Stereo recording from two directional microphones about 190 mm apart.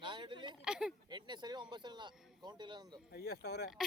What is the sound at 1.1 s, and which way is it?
Speech, 25° right (ahead or behind).